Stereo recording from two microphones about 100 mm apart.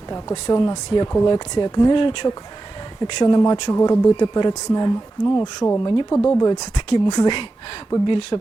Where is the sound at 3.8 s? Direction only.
35° left (ahead or behind).